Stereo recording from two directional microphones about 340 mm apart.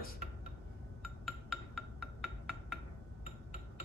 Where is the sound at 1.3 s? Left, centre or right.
Centre.